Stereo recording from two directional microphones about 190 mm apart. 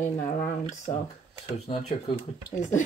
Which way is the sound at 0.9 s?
30° left (ahead or behind).